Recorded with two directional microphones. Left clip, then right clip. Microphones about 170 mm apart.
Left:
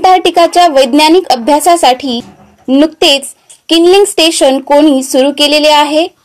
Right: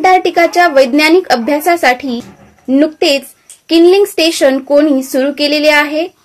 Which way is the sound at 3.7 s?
25° left (ahead or behind).